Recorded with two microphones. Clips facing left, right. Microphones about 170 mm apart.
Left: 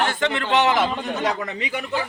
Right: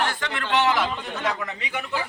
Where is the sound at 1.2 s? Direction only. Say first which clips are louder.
Left 1 dB; 35° left (ahead or behind).